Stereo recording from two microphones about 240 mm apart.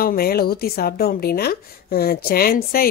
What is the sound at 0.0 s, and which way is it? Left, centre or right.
A woman's voice, left.